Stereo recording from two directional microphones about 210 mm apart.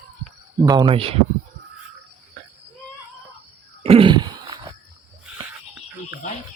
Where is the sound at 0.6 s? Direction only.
20° right (ahead or behind).